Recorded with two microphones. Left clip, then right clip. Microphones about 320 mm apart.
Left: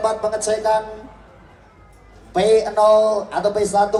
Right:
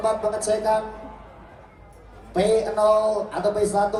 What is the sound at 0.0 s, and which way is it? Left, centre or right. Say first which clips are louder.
Speech: left 3 dB; centre.